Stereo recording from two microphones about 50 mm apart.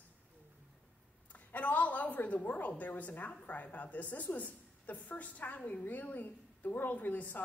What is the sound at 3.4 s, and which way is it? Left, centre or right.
A woman's voice, left.